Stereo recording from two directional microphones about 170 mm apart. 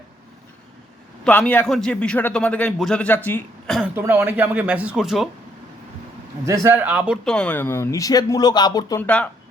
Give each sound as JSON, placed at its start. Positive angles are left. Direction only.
{"t": 1.2, "sound": "a man's voice", "side_deg": 10}
{"t": 3.8, "sound": "speech", "side_deg": -10}
{"t": 6.4, "sound": "speech", "side_deg": -20}
{"t": 7.3, "sound": "speech", "side_deg": 5}
{"t": 9.0, "sound": "a man's voice", "side_deg": 10}